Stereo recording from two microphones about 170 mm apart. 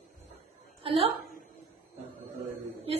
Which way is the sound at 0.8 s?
35° right (ahead or behind).